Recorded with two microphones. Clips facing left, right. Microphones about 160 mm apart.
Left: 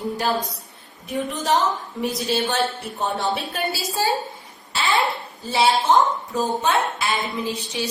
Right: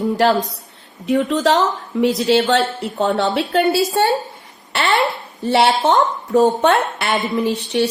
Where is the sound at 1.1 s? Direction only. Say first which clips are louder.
Right 7 dB; 75° right (ahead or behind); by 3.9 s 55° right (ahead or behind).